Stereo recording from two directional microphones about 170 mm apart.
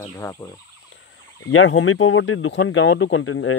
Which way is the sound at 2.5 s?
90° left.